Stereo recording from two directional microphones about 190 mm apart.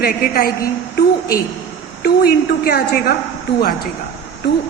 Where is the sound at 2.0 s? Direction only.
55° left (ahead or behind).